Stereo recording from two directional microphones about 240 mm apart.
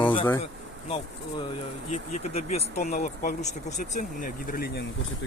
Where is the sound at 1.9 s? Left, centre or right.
Left.